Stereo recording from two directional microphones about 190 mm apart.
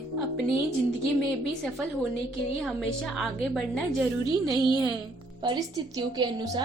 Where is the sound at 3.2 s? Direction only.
Centre (ahead or behind).